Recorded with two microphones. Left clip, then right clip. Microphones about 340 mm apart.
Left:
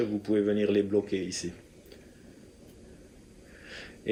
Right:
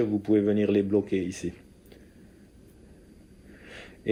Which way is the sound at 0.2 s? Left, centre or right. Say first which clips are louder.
Right 2 dB; centre.